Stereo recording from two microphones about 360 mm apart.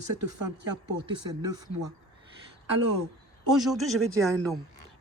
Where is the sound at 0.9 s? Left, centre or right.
Centre.